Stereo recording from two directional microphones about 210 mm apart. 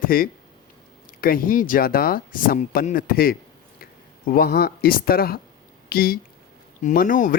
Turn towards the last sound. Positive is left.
turn(degrees=40)  # may be behind; listen again after turning